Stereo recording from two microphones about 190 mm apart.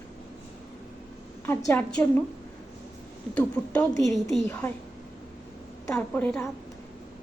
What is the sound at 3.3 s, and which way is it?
A woman's voice, 5° left (ahead or behind).